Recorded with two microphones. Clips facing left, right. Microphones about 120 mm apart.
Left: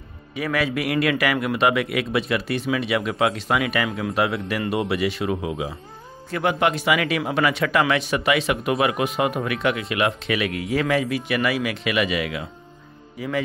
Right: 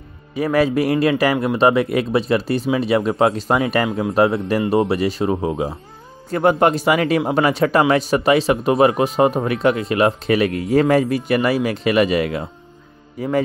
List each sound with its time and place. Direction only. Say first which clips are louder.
0.4 s a man's voice: right 7 dB; 40° right (ahead or behind)